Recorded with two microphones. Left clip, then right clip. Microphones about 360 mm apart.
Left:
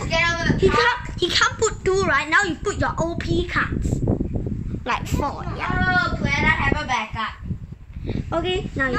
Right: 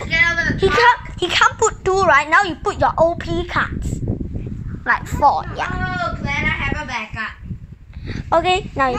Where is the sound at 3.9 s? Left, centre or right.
Left.